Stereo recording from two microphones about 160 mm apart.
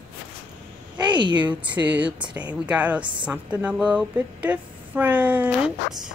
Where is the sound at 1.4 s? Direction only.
10° right (ahead or behind).